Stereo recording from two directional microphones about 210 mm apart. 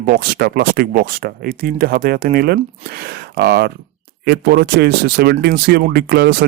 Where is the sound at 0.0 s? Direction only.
45° right (ahead or behind).